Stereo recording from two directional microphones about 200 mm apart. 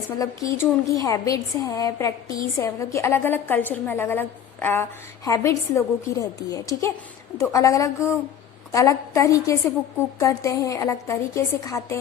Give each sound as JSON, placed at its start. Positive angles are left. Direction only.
{"t": 0.6, "sound": "a woman's voice", "side_deg": 15}